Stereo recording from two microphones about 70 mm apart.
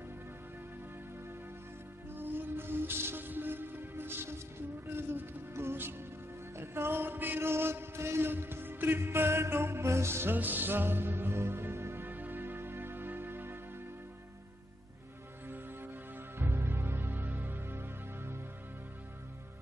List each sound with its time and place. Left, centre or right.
2.1 s music: right
15.4 s music: right